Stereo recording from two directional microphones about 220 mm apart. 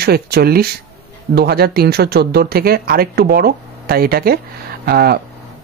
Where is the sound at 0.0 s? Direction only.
45° right (ahead or behind).